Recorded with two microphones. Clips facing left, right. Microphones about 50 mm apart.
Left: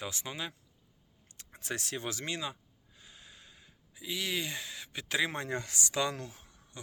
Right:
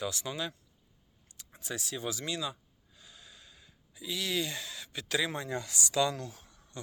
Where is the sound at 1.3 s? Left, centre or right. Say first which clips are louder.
Left 1 dB; left.